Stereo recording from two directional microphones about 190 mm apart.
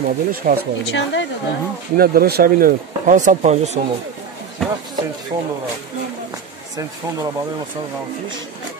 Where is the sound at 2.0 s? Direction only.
50° right (ahead or behind).